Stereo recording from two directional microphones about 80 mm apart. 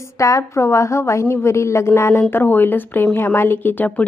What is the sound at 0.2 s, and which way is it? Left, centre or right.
A woman's voice, left.